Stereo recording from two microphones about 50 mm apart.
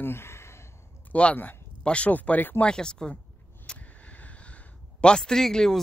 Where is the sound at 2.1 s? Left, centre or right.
Left.